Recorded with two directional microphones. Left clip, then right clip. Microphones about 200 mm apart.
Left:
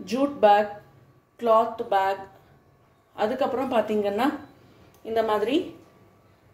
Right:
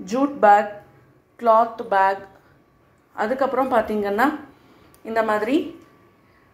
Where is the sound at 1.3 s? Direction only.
10° right (ahead or behind).